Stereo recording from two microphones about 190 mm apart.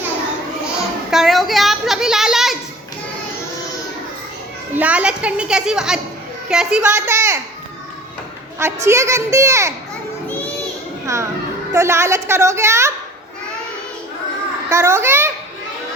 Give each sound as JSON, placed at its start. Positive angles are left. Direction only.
{"t": 1.1, "sound": "a child's voice", "side_deg": 0}
{"t": 4.7, "sound": "a child's voice", "side_deg": -5}
{"t": 8.5, "sound": "a child's voice", "side_deg": -15}
{"t": 11.0, "sound": "a child's voice", "side_deg": -15}
{"t": 14.7, "sound": "a child's voice", "side_deg": -15}